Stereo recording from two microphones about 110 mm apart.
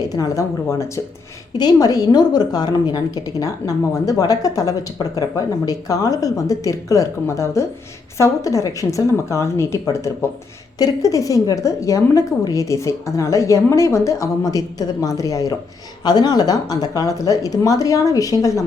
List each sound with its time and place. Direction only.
0.0 s a woman's voice: 35° left (ahead or behind)